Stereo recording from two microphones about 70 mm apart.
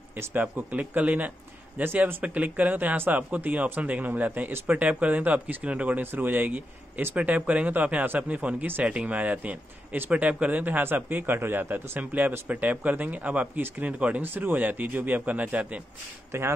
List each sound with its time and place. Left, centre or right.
0.3 s speech: right
16.3 s speech: right